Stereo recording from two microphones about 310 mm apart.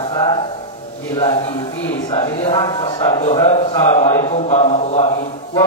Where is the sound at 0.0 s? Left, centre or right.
Centre.